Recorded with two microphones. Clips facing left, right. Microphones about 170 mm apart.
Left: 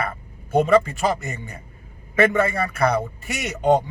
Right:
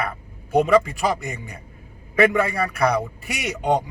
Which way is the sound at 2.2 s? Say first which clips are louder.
Even; centre (ahead or behind).